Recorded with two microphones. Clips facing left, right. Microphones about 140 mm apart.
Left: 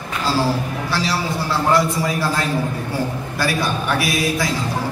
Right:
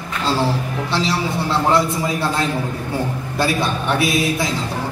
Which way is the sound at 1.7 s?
25° right (ahead or behind).